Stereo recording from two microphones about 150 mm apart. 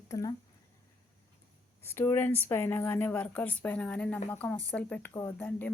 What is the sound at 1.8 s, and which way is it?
A woman's voice, 15° left (ahead or behind).